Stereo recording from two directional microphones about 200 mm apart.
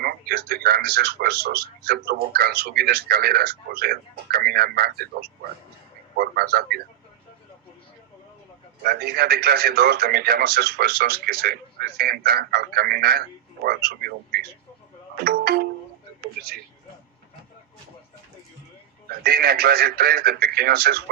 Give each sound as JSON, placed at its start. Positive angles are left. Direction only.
{"t": 0.0, "sound": "speech", "side_deg": -50}
{"t": 8.8, "sound": "speech", "side_deg": -50}
{"t": 19.2, "sound": "speech", "side_deg": -50}